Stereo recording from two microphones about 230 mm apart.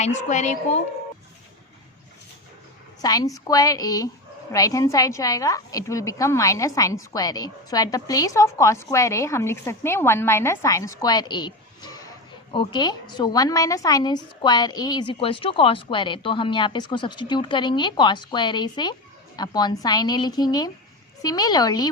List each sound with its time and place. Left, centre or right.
0.0 s a woman's voice: left
3.0 s a woman's voice: centre